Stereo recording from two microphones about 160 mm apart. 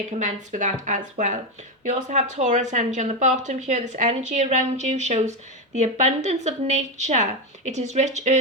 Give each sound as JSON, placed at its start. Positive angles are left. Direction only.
{"t": 0.2, "sound": "speech", "side_deg": -50}